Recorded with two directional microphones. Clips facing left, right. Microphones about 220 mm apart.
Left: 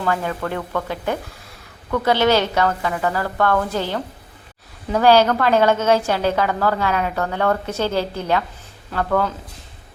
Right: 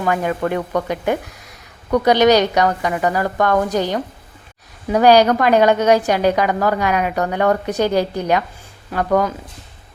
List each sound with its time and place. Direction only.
0.0 s a woman's voice: 15° right (ahead or behind)